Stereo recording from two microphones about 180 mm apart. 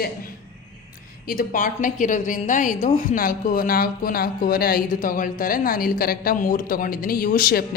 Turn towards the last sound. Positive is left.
turn(degrees=55)  # may be behind; listen again after turning